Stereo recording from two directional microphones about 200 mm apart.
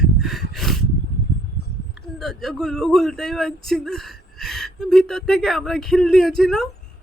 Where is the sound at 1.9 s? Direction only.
Centre (ahead or behind).